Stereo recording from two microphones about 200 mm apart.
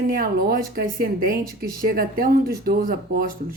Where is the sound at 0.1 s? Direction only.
45° right (ahead or behind).